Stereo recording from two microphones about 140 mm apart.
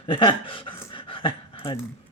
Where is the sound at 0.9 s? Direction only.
35° left (ahead or behind).